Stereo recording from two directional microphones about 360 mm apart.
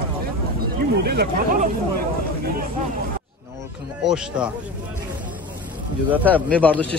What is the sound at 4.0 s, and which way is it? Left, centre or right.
Speech, centre.